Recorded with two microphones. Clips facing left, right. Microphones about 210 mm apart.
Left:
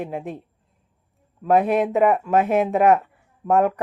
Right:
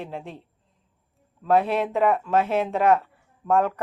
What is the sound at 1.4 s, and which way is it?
Speech, 15° left (ahead or behind).